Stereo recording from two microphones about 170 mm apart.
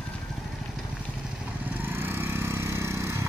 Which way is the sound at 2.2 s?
15° right (ahead or behind).